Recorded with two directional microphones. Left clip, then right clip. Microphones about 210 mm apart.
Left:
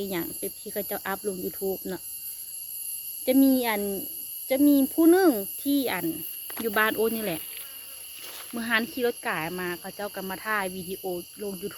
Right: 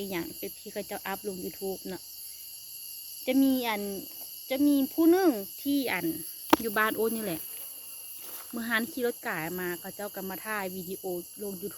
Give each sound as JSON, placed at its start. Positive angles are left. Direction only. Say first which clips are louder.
{"t": 0.0, "sound": "speech", "louder": "left 3 dB", "side_deg": 10}
{"t": 3.2, "sound": "speech", "louder": "left 4 dB", "side_deg": 15}